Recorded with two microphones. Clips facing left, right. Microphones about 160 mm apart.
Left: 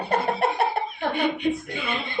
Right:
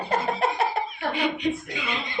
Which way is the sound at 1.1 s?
55° left (ahead or behind).